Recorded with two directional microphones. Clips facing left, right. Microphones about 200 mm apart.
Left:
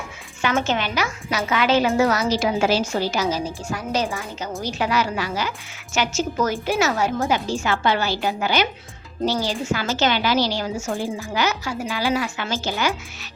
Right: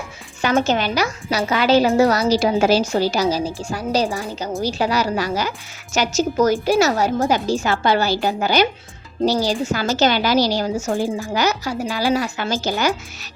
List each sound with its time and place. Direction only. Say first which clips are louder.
0.4 s a woman's voice: right 4 dB; 40° right (ahead or behind)